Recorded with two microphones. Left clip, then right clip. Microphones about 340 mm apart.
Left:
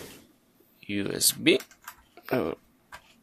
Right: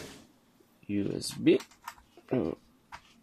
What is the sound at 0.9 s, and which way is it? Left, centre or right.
Speech, left.